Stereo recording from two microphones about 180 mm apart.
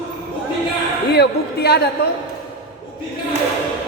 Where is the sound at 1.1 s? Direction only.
65° left (ahead or behind).